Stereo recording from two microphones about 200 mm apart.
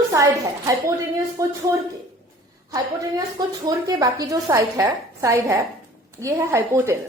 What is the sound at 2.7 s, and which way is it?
A woman's voice, 20° right (ahead or behind).